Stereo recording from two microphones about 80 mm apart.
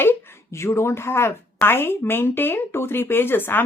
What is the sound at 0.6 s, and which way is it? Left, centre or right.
Speech, left.